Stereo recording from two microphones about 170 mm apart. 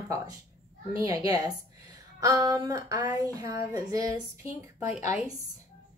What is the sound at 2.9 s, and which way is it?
Speech, 10° right (ahead or behind).